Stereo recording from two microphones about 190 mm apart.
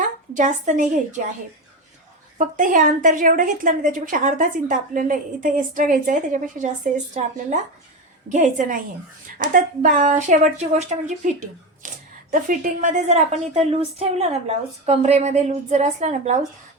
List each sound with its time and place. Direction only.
0.3 s a woman's voice: 40° right (ahead or behind)
2.4 s a woman's voice: 45° right (ahead or behind)